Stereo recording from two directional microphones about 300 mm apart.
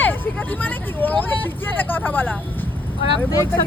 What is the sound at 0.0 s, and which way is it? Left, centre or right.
Speech, centre.